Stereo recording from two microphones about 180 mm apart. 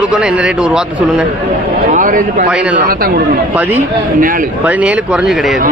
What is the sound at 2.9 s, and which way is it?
Speech, 55° right (ahead or behind).